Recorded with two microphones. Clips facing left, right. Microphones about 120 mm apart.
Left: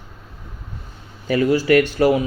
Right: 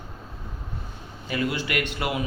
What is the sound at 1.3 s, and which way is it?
Speech, 35° left (ahead or behind).